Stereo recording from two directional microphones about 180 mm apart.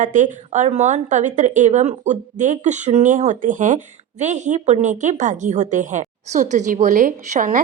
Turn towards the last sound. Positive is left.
turn(degrees=-50)  # may be behind; listen again after turning